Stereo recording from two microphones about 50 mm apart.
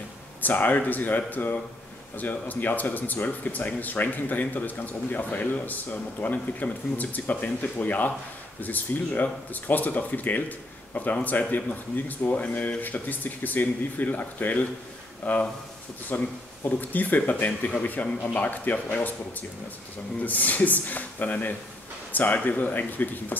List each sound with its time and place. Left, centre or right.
0.4 s speech: left
20.2 s speech: left